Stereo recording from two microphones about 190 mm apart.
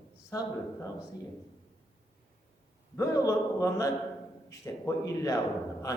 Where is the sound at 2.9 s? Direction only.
15° left (ahead or behind).